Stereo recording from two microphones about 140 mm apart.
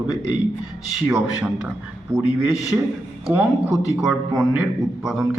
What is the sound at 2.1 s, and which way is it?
Speech, 20° right (ahead or behind).